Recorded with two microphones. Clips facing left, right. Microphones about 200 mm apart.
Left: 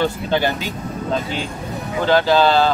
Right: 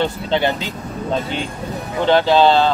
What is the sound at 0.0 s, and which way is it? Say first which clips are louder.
Speech: right 1 dB; 25° right (ahead or behind).